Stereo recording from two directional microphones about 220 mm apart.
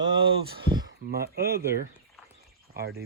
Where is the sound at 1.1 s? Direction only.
45° right (ahead or behind).